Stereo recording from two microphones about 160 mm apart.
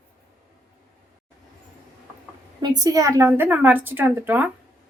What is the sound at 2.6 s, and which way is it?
A woman's voice, 25° right (ahead or behind).